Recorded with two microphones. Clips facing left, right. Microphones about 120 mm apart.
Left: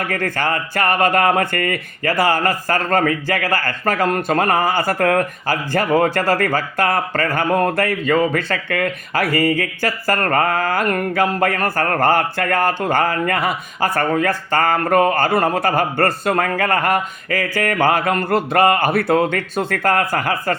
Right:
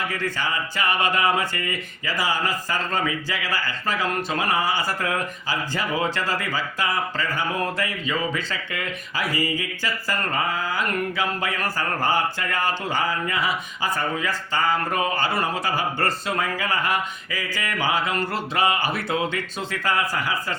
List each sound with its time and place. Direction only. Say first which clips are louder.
0.1 s speech: left 6 dB; 55° left (ahead or behind)